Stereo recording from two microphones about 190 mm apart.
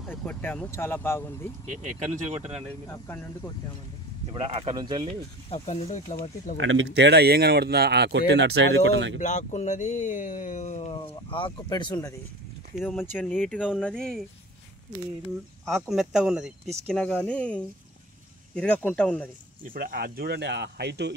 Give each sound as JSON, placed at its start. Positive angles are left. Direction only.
{"t": 0.1, "sound": "speech", "side_deg": 10}
{"t": 1.7, "sound": "speech", "side_deg": -40}
{"t": 2.9, "sound": "speech", "side_deg": 15}
{"t": 4.3, "sound": "speech", "side_deg": -30}
{"t": 5.5, "sound": "speech", "side_deg": 35}
{"t": 6.6, "sound": "speech", "side_deg": -80}
{"t": 9.2, "sound": "speech", "side_deg": 40}
{"t": 15.6, "sound": "speech", "side_deg": 0}
{"t": 19.6, "sound": "speech", "side_deg": -50}